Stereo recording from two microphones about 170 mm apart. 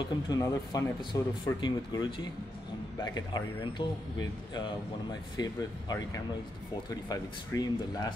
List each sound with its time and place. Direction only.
0.0 s speech: 20° left (ahead or behind)
5.4 s speech: 20° left (ahead or behind)